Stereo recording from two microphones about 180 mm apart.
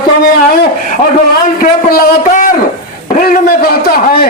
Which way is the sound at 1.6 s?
50° left (ahead or behind).